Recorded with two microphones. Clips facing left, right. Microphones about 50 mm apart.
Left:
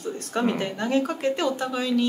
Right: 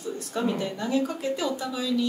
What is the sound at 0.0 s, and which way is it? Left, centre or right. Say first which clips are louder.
Speech: left 3 dB; left.